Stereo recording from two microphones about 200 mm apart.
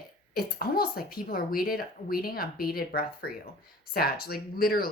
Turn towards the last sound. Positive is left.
turn(degrees=50)  # may be behind; listen again after turning